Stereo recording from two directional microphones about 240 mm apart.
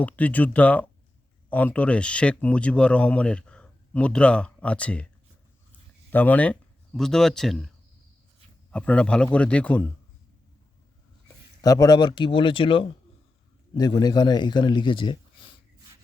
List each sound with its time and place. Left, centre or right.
0.0 s a man's voice: centre
6.1 s speech: centre
8.7 s speech: centre
11.6 s a man's voice: centre